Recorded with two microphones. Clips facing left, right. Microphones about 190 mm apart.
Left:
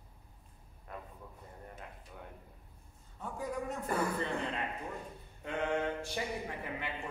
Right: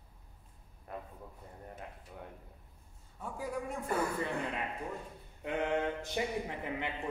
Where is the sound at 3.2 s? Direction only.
10° right (ahead or behind).